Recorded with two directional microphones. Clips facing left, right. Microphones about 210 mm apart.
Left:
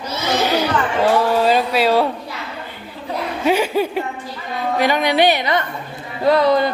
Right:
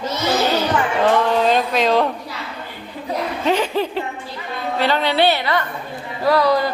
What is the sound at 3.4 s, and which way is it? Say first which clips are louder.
A woman's voice: left 3 dB; 10° left (ahead or behind).